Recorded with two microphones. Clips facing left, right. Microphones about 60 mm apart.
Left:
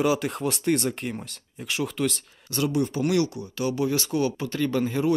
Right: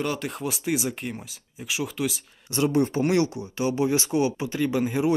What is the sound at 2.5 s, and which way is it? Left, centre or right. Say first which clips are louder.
Speech: right 3 dB; right.